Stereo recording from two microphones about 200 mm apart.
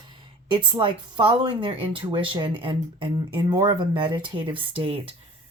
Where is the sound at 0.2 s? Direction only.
25° right (ahead or behind).